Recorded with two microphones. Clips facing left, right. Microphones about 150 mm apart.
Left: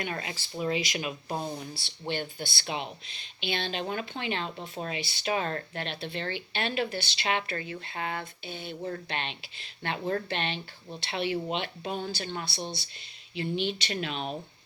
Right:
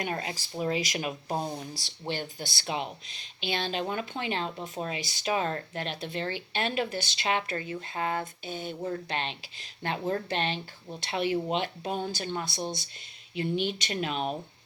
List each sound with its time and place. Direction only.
0.0 s speech: 35° right (ahead or behind)